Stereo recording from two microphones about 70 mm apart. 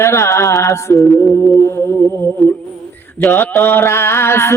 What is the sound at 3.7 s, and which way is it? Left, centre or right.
Mantra, left.